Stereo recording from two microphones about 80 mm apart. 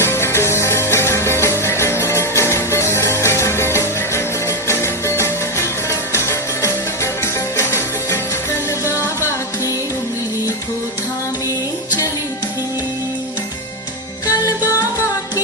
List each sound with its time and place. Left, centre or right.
0.0 s music: left